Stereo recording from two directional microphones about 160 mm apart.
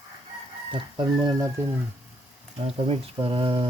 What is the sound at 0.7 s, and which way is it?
Speech, 30° right (ahead or behind).